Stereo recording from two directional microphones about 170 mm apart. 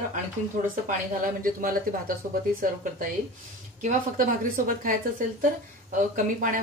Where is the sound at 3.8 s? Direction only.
50° right (ahead or behind).